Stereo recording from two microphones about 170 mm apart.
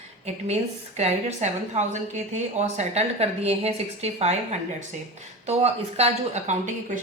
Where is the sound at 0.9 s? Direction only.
40° right (ahead or behind).